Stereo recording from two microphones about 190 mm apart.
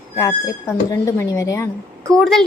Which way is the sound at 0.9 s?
15° left (ahead or behind).